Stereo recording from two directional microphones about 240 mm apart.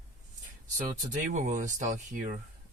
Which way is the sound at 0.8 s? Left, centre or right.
Right.